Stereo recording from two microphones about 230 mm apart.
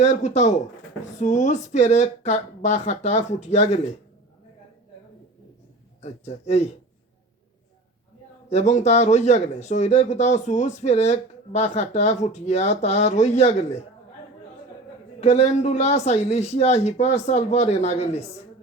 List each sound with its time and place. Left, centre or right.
0.0 s speech: left
6.0 s speech: left
8.4 s speech: left
15.2 s speech: left